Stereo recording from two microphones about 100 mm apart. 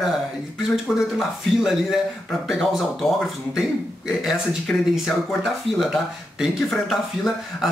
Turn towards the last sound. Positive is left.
turn(degrees=-5)  # may be behind; listen again after turning